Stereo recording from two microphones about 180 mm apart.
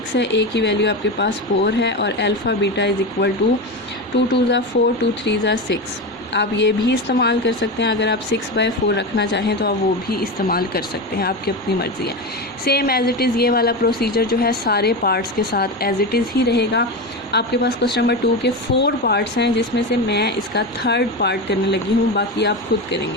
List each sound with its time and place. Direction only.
0.1 s speech: 75° left (ahead or behind)
4.7 s a woman's voice: 75° left (ahead or behind)